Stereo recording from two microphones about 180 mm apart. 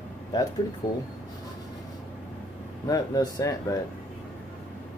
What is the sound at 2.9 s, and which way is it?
Speech, 20° left (ahead or behind).